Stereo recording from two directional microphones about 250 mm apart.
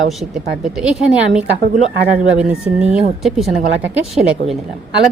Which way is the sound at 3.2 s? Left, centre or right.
Centre.